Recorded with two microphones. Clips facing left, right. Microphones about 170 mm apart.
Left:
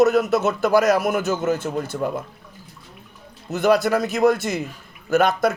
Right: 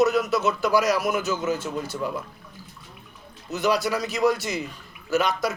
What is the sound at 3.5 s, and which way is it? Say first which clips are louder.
Speech: left 6 dB; 50° left (ahead or behind).